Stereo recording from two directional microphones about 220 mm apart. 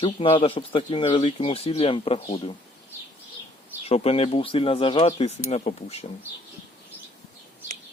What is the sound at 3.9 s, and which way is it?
Speech, 25° left (ahead or behind).